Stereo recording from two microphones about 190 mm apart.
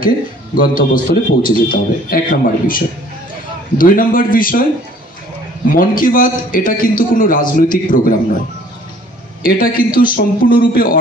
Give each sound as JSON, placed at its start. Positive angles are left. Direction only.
{"t": 0.6, "sound": "a man's voice", "side_deg": 45}
{"t": 5.7, "sound": "a man's voice", "side_deg": 45}
{"t": 9.4, "sound": "a man's voice", "side_deg": 50}